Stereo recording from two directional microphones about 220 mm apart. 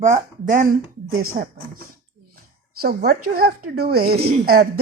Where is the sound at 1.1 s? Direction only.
75° right (ahead or behind).